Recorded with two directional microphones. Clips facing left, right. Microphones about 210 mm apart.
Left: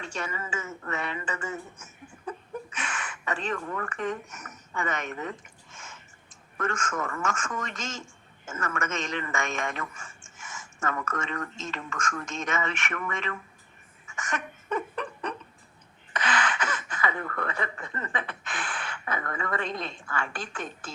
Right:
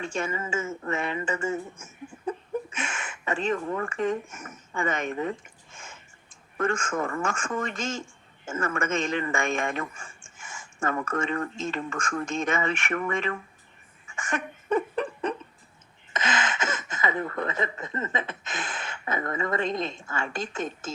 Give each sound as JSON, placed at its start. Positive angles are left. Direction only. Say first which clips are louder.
{"t": 0.0, "sound": "speech", "louder": "right 5 dB", "side_deg": -25}
{"t": 6.6, "sound": "speech", "louder": "right 4 dB", "side_deg": -30}
{"t": 14.1, "sound": "a sound", "louder": "right 3 dB", "side_deg": -30}
{"t": 16.1, "sound": "speech", "louder": "even", "side_deg": -25}